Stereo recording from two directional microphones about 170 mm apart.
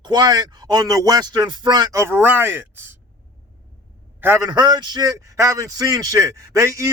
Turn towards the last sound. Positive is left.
turn(degrees=-20)  # may be behind; listen again after turning